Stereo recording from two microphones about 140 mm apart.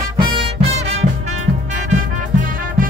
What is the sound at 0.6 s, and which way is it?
Music, 50° right (ahead or behind).